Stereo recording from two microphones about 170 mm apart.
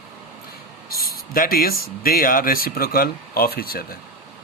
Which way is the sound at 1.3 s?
60° left (ahead or behind).